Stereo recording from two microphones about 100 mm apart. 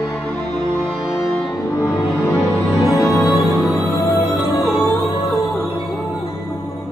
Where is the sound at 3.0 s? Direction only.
Centre (ahead or behind).